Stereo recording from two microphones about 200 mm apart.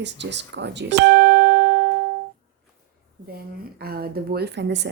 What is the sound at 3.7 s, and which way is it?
A woman's voice, 50° right (ahead or behind).